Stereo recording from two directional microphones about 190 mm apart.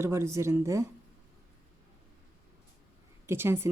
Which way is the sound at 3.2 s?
10° right (ahead or behind).